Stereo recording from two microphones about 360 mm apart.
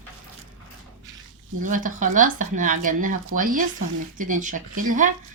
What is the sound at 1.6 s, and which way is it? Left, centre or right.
A woman's voice, right.